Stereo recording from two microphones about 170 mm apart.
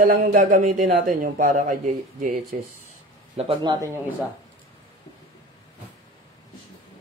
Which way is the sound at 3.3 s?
35° right (ahead or behind).